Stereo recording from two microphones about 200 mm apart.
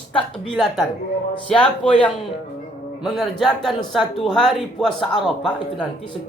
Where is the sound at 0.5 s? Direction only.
5° left (ahead or behind).